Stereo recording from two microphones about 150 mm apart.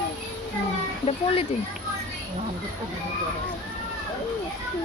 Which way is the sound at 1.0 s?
40° left (ahead or behind).